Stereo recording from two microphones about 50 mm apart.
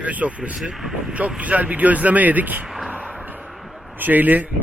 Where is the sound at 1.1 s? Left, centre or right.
Right.